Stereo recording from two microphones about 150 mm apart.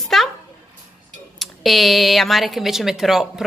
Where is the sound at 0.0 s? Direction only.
Centre (ahead or behind).